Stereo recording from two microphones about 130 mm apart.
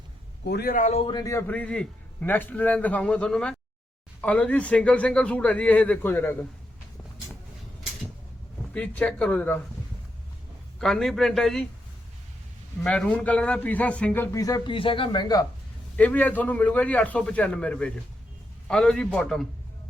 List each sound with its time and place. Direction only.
0.7 s speech: 75° left (ahead or behind)
1.2 s a man's voice: 20° left (ahead or behind)
1.5 s a man's voice: 10° left (ahead or behind)
8.7 s a man's voice: 10° left (ahead or behind)
10.8 s a man's voice: 5° left (ahead or behind)
12.8 s a man's voice: 5° left (ahead or behind)
14.3 s speech: 30° left (ahead or behind)
16.0 s a man's voice: 10° left (ahead or behind)